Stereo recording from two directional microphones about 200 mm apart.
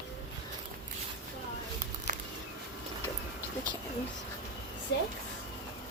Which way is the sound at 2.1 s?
40° right (ahead or behind).